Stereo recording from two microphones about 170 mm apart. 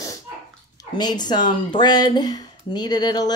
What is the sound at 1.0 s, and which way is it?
Speech, 25° left (ahead or behind).